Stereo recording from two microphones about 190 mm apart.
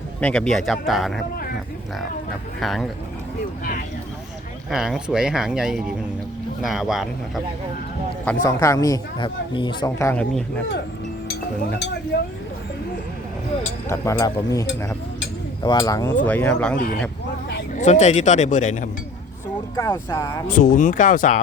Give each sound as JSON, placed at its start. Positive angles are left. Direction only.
{"t": 0.2, "sound": "speech", "side_deg": 5}
{"t": 2.6, "sound": "speech", "side_deg": 0}
{"t": 3.6, "sound": "a sound", "side_deg": 50}
{"t": 4.7, "sound": "speech", "side_deg": 0}
{"t": 8.2, "sound": "speech", "side_deg": 10}
{"t": 12.1, "sound": "speech", "side_deg": 55}
{"t": 13.8, "sound": "speech", "side_deg": 15}
{"t": 17.7, "sound": "speech", "side_deg": 40}
{"t": 19.7, "sound": "speech", "side_deg": 20}
{"t": 20.5, "sound": "speech", "side_deg": 45}